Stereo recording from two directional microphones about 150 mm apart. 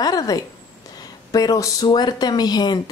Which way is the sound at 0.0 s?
25° left (ahead or behind).